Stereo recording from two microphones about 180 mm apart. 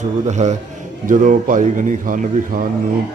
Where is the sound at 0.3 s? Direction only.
40° right (ahead or behind).